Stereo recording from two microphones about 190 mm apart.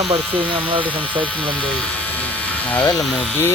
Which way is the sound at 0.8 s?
10° left (ahead or behind).